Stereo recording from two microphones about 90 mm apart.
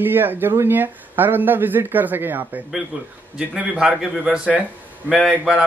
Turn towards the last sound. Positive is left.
turn(degrees=-10)  # may be behind; listen again after turning